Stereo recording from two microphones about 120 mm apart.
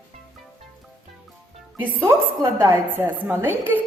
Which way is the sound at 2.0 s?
20° right (ahead or behind).